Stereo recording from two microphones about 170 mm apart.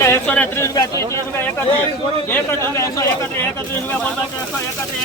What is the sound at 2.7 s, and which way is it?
Speech, 20° left (ahead or behind).